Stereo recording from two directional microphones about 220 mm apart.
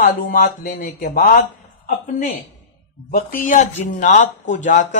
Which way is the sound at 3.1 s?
40° left (ahead or behind).